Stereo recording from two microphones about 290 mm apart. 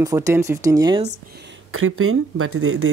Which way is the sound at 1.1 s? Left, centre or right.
Right.